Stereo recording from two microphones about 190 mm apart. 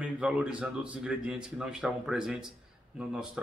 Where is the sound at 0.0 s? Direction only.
5° right (ahead or behind).